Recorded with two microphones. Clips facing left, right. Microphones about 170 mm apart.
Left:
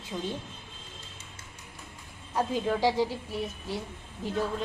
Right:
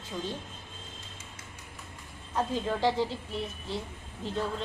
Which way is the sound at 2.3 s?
10° left (ahead or behind).